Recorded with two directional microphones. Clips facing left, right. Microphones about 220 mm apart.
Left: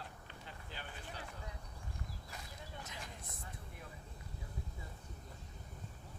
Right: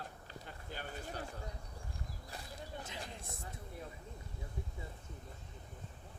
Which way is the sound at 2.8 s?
30° right (ahead or behind).